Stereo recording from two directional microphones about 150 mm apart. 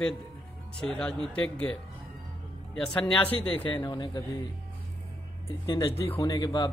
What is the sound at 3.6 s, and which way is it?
Speech, 30° left (ahead or behind).